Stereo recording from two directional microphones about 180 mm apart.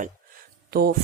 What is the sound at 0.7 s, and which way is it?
Speech, 60° right (ahead or behind).